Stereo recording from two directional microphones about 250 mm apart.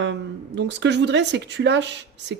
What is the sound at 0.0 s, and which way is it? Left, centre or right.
Speech, right.